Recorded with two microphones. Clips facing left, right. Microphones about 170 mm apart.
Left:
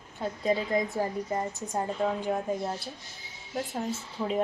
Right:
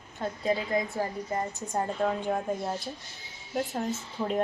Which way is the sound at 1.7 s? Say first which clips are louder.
Right 1 dB; 5° left (ahead or behind).